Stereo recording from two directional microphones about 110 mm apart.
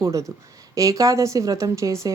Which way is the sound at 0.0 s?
30° right (ahead or behind).